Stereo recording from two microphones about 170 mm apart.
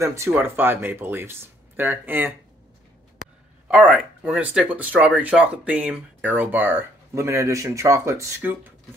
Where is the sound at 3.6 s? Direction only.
5° right (ahead or behind).